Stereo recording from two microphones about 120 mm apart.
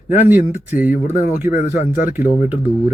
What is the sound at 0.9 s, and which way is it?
Speech, 90° left.